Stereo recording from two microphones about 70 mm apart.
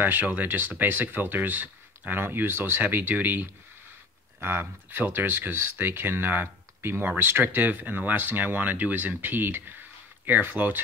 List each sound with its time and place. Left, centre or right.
0.0 s speech: right